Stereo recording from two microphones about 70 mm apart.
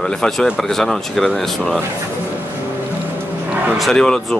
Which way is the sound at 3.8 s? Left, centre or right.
Centre.